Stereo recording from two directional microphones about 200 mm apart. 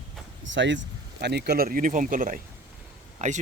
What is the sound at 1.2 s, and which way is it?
Speech, 55° right (ahead or behind).